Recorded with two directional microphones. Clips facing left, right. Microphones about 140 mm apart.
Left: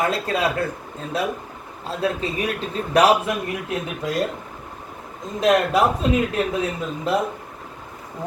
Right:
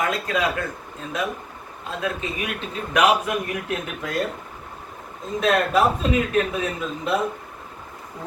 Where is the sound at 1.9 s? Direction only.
35° left (ahead or behind).